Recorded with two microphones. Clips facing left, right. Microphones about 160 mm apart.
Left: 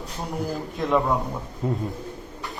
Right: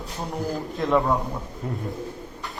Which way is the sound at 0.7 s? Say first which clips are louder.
Right 1 dB; centre (ahead or behind).